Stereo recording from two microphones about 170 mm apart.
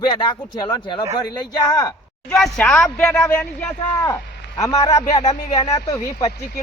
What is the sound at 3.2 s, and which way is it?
Speech, 20° left (ahead or behind).